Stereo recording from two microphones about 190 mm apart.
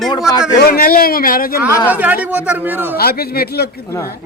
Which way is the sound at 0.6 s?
50° left (ahead or behind).